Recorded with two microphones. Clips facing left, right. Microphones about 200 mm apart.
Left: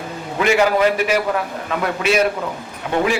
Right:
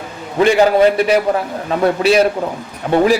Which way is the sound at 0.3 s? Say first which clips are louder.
Right 5 dB; 30° right (ahead or behind).